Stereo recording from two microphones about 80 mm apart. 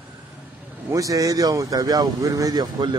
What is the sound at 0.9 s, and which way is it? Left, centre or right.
Speech, right.